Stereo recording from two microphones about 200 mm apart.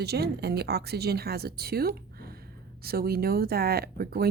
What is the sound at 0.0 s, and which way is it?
Speech, 55° right (ahead or behind).